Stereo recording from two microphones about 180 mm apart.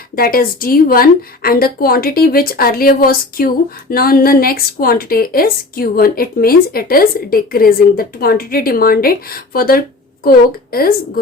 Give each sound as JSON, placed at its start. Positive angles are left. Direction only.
{"t": 0.2, "sound": "a woman's voice", "side_deg": 55}